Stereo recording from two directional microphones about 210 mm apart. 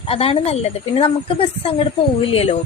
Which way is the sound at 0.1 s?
25° left (ahead or behind).